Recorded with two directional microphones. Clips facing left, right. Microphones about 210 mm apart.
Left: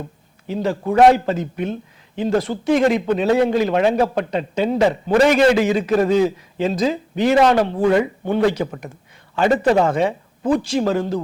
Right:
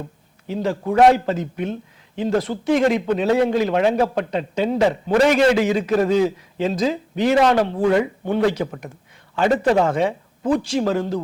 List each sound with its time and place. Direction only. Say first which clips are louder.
0.6 s a man's voice: left 1 dB; 20° left (ahead or behind)
2.6 s a man's voice: left 1 dB; 10° left (ahead or behind)